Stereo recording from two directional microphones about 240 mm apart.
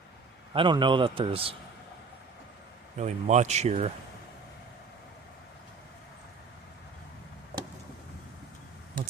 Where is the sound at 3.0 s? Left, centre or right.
Right.